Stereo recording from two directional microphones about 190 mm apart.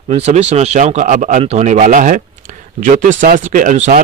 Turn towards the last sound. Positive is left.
turn(degrees=-40)  # may be behind; listen again after turning